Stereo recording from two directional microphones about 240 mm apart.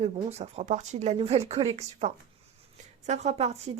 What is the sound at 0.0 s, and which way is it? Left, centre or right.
A woman's voice, right.